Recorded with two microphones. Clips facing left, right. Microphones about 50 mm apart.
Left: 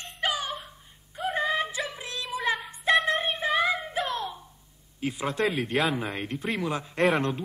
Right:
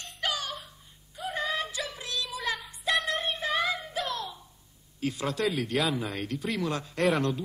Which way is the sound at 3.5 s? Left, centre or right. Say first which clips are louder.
Left 4 dB; centre.